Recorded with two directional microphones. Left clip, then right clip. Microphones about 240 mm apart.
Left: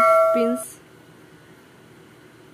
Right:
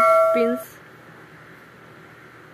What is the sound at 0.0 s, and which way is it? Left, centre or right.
Doorbell, centre.